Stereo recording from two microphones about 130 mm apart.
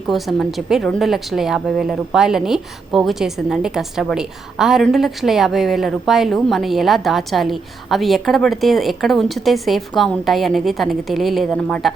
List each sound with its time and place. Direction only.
0.1 s a woman's voice: centre (ahead or behind)